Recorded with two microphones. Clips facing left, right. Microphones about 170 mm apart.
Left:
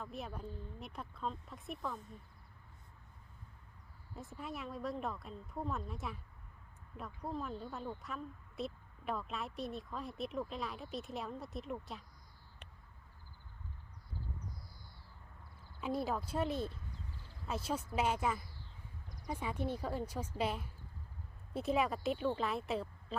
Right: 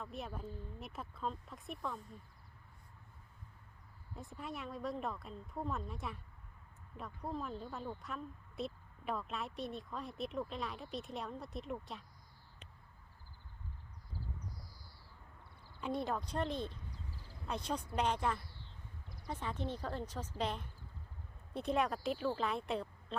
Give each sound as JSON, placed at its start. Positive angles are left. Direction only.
{"t": 0.0, "sound": "speech", "side_deg": 0}
{"t": 4.1, "sound": "speech", "side_deg": 0}
{"t": 15.8, "sound": "speech", "side_deg": 5}
{"t": 19.0, "sound": "a sound", "side_deg": -25}
{"t": 19.3, "sound": "speech", "side_deg": 10}